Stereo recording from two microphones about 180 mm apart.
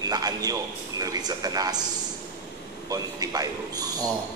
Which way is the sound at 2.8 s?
20° right (ahead or behind).